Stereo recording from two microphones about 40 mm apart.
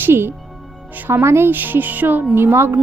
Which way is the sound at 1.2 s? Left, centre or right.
Right.